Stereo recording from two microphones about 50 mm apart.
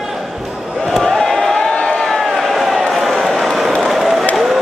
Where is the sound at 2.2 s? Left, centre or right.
Centre.